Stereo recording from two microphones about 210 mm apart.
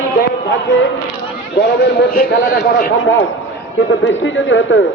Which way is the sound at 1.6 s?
50° left (ahead or behind).